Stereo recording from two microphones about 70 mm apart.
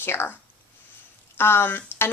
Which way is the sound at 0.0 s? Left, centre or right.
Left.